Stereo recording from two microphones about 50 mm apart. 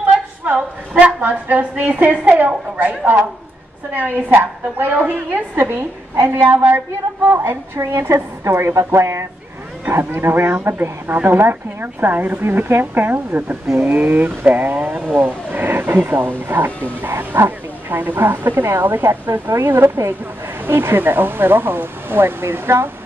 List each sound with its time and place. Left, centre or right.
0.9 s a woman's voice: right
9.9 s a woman's voice: right
19.5 s a woman's voice: right